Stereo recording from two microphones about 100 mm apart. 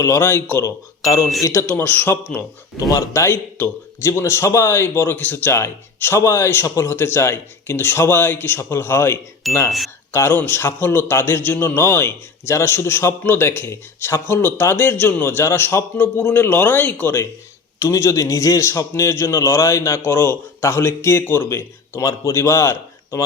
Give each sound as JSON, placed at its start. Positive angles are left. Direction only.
{"t": 0.0, "sound": "a man's voice", "side_deg": 25}
{"t": 0.6, "sound": "a man's voice", "side_deg": 35}
{"t": 2.7, "sound": "a man's voice", "side_deg": 40}